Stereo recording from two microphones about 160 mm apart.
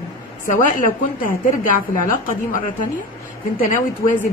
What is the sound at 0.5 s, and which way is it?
Speech, 55° left (ahead or behind).